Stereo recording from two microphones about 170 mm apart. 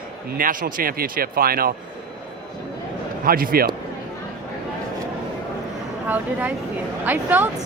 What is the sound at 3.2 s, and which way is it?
Speech, 60° right (ahead or behind).